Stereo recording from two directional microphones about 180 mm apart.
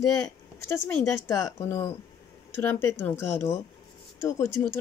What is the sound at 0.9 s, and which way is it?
Speech, 15° left (ahead or behind).